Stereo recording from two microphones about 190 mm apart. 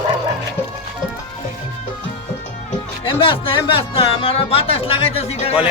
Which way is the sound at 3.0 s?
25° left (ahead or behind).